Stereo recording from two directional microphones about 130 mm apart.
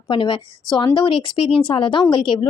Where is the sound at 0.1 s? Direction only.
40° left (ahead or behind).